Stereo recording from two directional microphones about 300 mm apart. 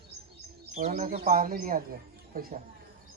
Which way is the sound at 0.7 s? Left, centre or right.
Right.